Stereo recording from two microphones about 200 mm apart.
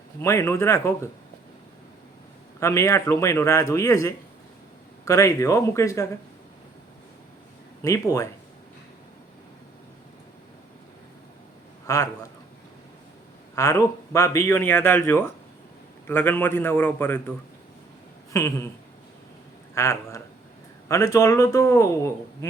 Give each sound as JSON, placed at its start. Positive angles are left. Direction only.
{"t": 0.2, "sound": "a man's voice", "side_deg": 15}
{"t": 2.6, "sound": "a man's voice", "side_deg": 15}
{"t": 7.8, "sound": "a man's voice", "side_deg": 15}
{"t": 11.9, "sound": "a man's voice", "side_deg": 15}
{"t": 13.6, "sound": "a man's voice", "side_deg": 15}
{"t": 18.3, "sound": "a man's voice", "side_deg": 15}
{"t": 19.7, "sound": "a man's voice", "side_deg": 15}